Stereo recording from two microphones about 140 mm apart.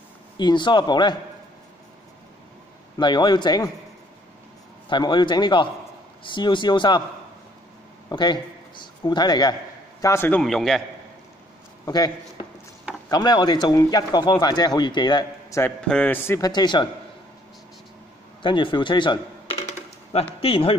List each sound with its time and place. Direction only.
0.4 s a man's voice: 30° left (ahead or behind)
3.0 s a man's voice: 30° left (ahead or behind)
4.8 s a man's voice: 35° left (ahead or behind)
8.1 s a man's voice: 30° left (ahead or behind)
10.0 s a man's voice: 15° left (ahead or behind)
10.4 s a man's voice: centre (ahead or behind)
11.8 s a man's voice: 30° left (ahead or behind)
15.6 s a man's voice: 10° left (ahead or behind)
16.3 s speech: 30° left (ahead or behind)
18.4 s speech: 35° left (ahead or behind)
19.6 s a sound: 45° left (ahead or behind)